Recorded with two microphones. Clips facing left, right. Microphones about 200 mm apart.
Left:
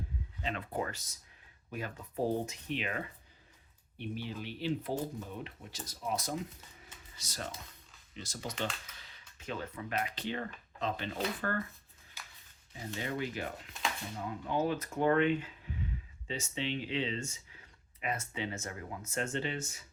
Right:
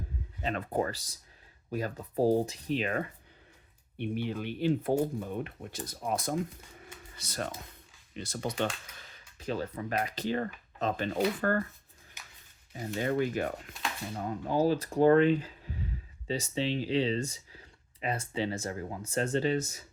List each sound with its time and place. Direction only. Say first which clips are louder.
0.4 s speech: right 6 dB; 45° right (ahead or behind)
3.9 s speech: right 7 dB; 60° right (ahead or behind)
9.0 s speech: right 5 dB; 40° right (ahead or behind)
12.2 s a sound: left 1 dB; 20° right (ahead or behind)
13.0 s speech: right 8 dB; 50° right (ahead or behind)
14.3 s speech: right 5 dB; 35° right (ahead or behind)